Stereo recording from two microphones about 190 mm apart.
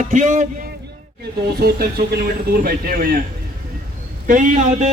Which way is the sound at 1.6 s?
55° right (ahead or behind).